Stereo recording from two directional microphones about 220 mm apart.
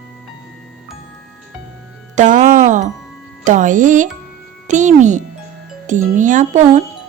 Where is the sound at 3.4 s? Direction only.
35° right (ahead or behind).